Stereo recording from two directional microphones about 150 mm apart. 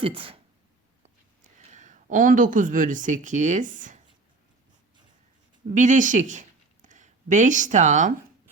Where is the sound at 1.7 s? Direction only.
55° right (ahead or behind).